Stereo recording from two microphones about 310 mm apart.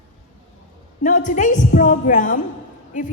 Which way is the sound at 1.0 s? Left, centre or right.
Left.